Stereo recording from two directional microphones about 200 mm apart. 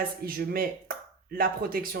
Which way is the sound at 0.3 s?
45° right (ahead or behind).